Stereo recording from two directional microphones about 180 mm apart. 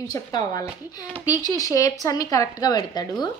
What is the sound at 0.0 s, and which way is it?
A woman's voice, 20° left (ahead or behind).